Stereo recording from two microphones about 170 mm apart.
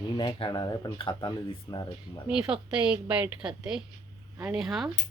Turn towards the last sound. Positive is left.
turn(degrees=0)  # may be behind; listen again after turning